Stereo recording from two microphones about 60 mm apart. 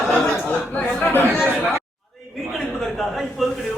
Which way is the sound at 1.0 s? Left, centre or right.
Left.